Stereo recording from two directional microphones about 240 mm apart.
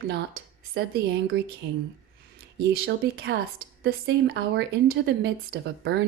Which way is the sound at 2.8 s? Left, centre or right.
Right.